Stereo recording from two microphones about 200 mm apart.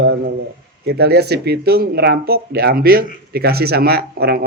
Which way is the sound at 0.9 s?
55° right (ahead or behind).